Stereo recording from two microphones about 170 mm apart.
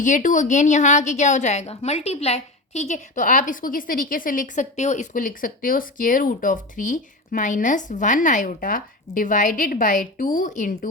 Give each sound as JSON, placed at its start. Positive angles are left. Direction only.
{"t": 0.0, "sound": "a woman's voice", "side_deg": 50}